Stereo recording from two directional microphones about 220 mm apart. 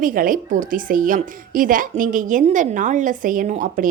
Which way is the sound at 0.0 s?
40° right (ahead or behind).